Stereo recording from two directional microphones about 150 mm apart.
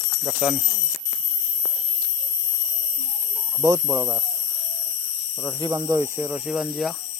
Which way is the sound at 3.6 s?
20° right (ahead or behind).